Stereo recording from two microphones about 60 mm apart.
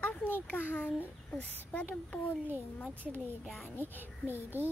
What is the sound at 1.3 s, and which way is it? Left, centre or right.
Speech, left.